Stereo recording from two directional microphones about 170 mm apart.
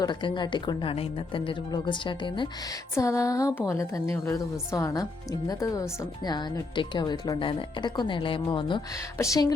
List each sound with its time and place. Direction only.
0.0 s a woman's voice: 30° left (ahead or behind)
2.9 s a woman's voice: 15° left (ahead or behind)